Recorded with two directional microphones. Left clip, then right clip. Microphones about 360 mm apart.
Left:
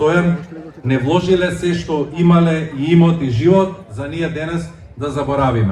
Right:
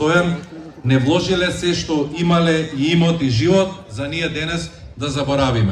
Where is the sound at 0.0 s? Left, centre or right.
Left.